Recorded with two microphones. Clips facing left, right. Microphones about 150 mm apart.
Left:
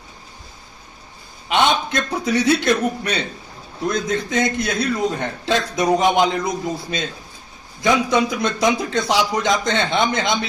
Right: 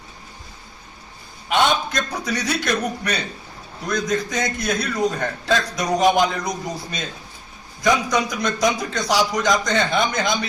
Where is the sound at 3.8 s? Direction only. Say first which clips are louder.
Left 1 dB; 25° left (ahead or behind).